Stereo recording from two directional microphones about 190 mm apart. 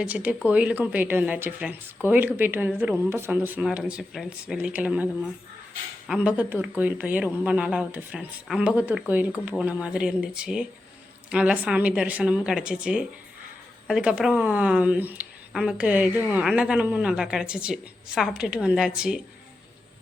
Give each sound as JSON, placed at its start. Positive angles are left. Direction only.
{"t": 0.0, "sound": "a woman's voice", "side_deg": -10}